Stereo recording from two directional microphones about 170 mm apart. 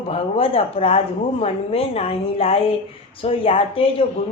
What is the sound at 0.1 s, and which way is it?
Speech, 35° left (ahead or behind).